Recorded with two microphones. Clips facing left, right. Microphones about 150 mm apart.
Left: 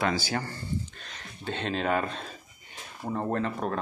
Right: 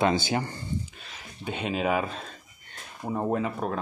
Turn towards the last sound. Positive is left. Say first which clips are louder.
# right 2 dB
turn(degrees=-5)  # may be behind; listen again after turning